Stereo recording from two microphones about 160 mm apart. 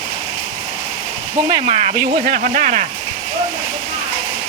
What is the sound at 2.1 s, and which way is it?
Speech, 60° right (ahead or behind).